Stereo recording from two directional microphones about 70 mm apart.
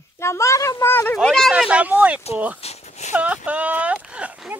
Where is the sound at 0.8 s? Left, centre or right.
Left.